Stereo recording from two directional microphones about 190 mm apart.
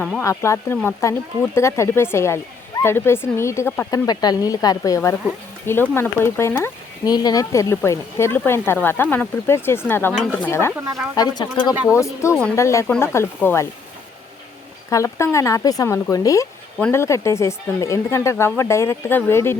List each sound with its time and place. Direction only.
0.0 s speech: 10° left (ahead or behind)
10.8 s speech: 15° right (ahead or behind)
11.1 s speech: 20° left (ahead or behind)
11.7 s speech: 10° right (ahead or behind)
11.9 s speech: 15° left (ahead or behind)
14.8 s speech: 15° left (ahead or behind)